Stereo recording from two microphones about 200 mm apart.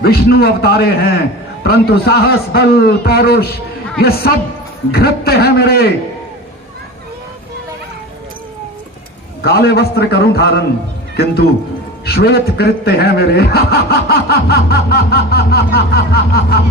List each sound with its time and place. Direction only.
0.0 s a man's voice: 50° left (ahead or behind)
9.4 s a man's voice: 50° left (ahead or behind)
12.0 s a man's voice: 50° left (ahead or behind)